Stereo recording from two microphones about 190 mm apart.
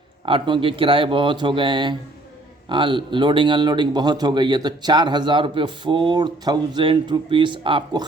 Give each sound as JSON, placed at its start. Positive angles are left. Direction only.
{"t": 0.3, "sound": "speech", "side_deg": -25}